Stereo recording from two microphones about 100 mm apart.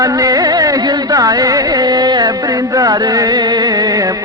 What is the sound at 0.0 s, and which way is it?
Music, 35° right (ahead or behind).